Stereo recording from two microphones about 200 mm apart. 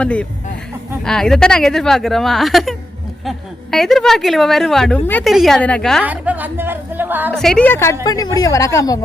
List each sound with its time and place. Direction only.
0.0 s a woman's voice: 5° left (ahead or behind)
6.0 s a woman's voice: 5° right (ahead or behind)
7.3 s speech: 5° left (ahead or behind)